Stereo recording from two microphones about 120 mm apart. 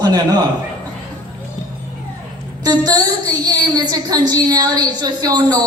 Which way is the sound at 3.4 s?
35° right (ahead or behind).